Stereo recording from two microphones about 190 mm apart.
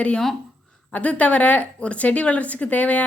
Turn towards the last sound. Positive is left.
turn(degrees=5)  # may be behind; listen again after turning